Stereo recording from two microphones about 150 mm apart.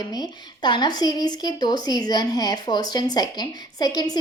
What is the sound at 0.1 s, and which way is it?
A woman's voice, 25° left (ahead or behind).